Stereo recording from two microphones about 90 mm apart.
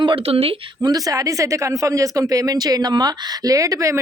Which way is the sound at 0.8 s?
45° right (ahead or behind).